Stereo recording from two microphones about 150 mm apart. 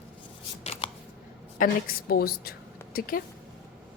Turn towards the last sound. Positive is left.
turn(degrees=75)  # may be behind; listen again after turning